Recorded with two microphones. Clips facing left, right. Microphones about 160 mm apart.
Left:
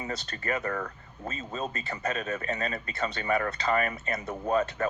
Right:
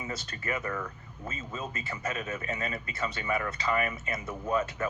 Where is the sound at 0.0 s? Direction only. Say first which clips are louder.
Left 2 dB; 30° left (ahead or behind).